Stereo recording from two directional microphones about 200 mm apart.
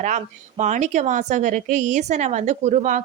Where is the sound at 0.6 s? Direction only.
35° right (ahead or behind).